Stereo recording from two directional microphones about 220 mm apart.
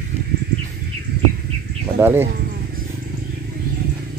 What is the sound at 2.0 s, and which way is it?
Speech, 10° right (ahead or behind).